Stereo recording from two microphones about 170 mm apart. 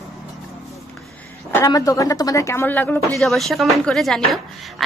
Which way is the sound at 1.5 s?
20° left (ahead or behind).